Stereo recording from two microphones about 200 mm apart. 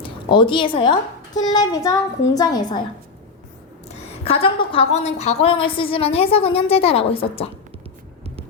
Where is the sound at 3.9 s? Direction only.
30° left (ahead or behind).